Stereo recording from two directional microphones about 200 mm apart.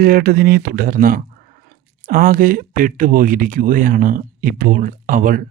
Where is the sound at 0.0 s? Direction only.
45° right (ahead or behind).